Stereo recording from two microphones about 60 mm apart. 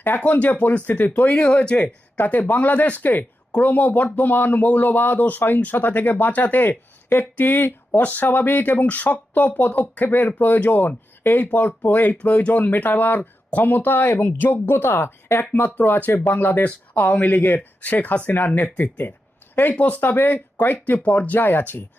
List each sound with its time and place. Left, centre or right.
0.2 s speech: left